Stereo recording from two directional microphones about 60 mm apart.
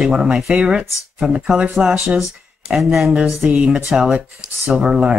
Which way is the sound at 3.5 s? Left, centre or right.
Centre.